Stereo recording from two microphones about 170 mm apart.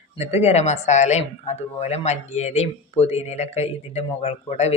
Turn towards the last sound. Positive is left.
turn(degrees=40)  # may be behind; listen again after turning